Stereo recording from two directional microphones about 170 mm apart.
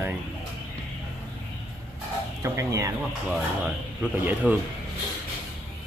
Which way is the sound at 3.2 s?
5° right (ahead or behind).